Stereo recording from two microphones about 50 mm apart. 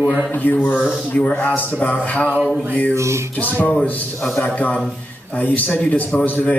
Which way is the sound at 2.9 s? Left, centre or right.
Right.